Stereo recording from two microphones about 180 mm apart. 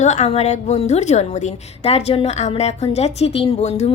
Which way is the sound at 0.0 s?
40° left (ahead or behind).